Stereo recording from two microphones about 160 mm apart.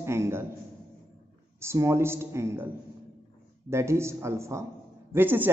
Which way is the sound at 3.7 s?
15° right (ahead or behind).